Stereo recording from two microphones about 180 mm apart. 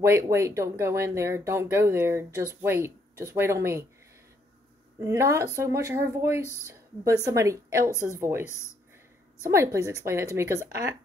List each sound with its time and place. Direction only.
0.0 s speech: 15° right (ahead or behind)
5.0 s speech: 15° right (ahead or behind)
9.5 s speech: 15° right (ahead or behind)